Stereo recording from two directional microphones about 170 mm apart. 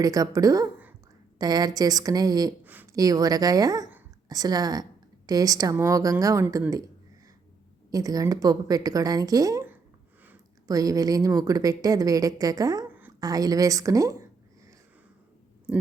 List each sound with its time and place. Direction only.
0.0 s a woman's voice: 20° right (ahead or behind)